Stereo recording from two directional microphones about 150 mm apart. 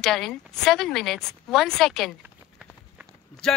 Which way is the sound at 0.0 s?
Centre (ahead or behind).